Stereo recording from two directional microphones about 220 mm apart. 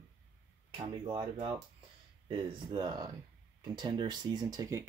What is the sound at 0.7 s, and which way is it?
Speech, 25° right (ahead or behind).